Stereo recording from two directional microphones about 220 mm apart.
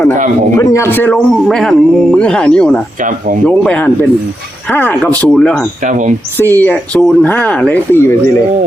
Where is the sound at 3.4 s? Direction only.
5° left (ahead or behind).